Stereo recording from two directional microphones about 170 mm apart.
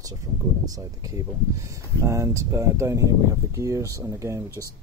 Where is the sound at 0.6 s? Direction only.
20° right (ahead or behind).